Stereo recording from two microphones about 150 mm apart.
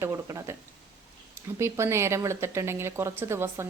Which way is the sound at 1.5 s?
20° right (ahead or behind).